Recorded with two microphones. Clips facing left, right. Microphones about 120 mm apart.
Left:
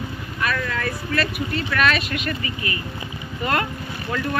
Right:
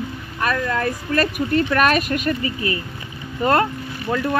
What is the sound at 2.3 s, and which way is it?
Speech, 30° right (ahead or behind).